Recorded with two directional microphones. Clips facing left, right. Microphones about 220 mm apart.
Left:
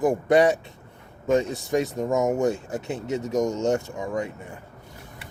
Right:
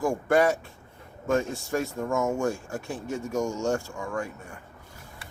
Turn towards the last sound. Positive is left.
turn(degrees=20)  # may be behind; listen again after turning